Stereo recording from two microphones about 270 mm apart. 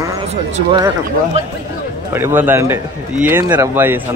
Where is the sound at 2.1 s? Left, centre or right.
Centre.